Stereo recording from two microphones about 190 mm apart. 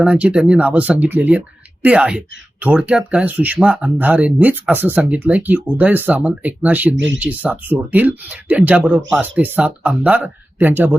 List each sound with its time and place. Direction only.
0.0 s speech: 5° right (ahead or behind)
6.9 s speech: 75° right (ahead or behind)
7.2 s speech: 10° right (ahead or behind)